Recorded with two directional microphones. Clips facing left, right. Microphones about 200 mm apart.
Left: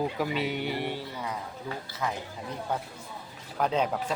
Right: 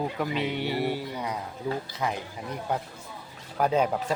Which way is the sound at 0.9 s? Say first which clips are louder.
Right 4 dB; 15° right (ahead or behind).